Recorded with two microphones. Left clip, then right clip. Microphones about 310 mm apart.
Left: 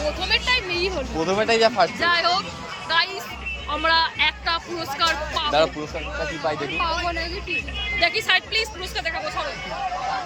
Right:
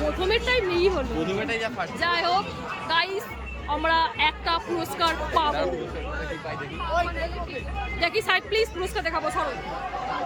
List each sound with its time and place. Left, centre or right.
0.2 s speech: centre
1.4 s speech: centre
2.0 s speech: centre
7.9 s speech: centre